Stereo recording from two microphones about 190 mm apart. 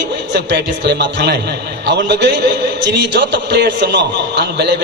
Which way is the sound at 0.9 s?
60° right (ahead or behind).